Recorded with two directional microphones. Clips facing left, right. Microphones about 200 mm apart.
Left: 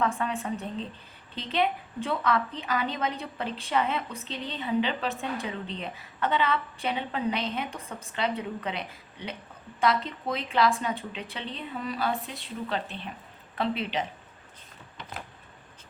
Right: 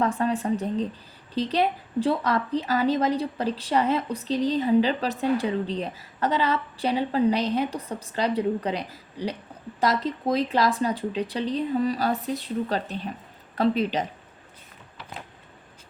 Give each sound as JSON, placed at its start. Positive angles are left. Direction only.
{"t": 0.0, "sound": "a woman's voice", "side_deg": -35}